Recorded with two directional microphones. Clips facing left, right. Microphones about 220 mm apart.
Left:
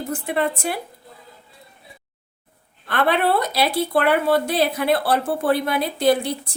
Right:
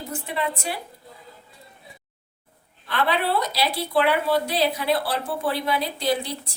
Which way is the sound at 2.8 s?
55° left (ahead or behind).